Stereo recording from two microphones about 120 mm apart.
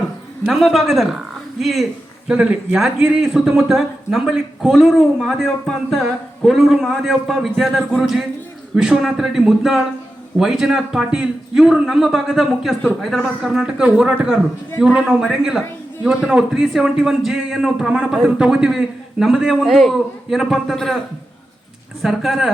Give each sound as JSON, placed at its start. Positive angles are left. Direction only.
{"t": 0.4, "sound": "a man's voice", "side_deg": 0}
{"t": 22.0, "sound": "a man's voice", "side_deg": 0}